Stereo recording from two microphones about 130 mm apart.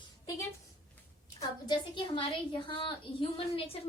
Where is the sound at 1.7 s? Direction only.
40° left (ahead or behind).